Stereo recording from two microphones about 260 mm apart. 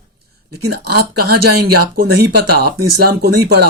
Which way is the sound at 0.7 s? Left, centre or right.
Right.